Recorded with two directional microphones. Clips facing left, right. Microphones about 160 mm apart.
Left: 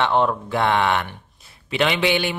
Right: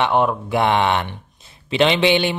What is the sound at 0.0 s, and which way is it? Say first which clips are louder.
Speech: right 1 dB; 10° right (ahead or behind).